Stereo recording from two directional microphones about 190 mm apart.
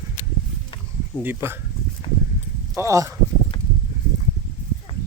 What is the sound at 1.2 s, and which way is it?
Speech, 10° right (ahead or behind).